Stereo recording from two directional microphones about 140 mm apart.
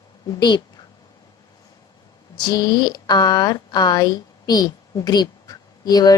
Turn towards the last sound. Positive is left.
turn(degrees=30)  # may be behind; listen again after turning